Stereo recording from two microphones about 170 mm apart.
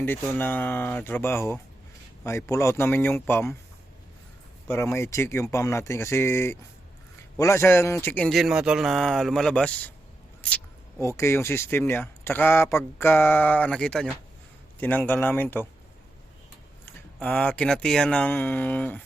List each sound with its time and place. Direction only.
0.0 s speech: 10° left (ahead or behind)
4.7 s a man's voice: 15° left (ahead or behind)
10.4 s a sound: 5° left (ahead or behind)
11.2 s speech: 15° left (ahead or behind)
16.8 s speech: 10° left (ahead or behind)